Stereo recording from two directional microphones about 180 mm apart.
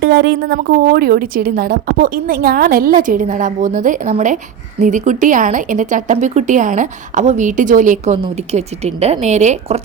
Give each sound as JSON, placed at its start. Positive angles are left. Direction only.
{"t": 0.0, "sound": "speech", "side_deg": -70}